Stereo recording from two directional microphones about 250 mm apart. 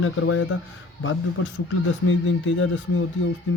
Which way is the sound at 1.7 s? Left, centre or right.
Left.